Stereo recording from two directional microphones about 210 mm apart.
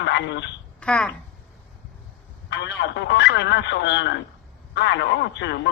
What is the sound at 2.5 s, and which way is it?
A woman's voice, 55° left (ahead or behind).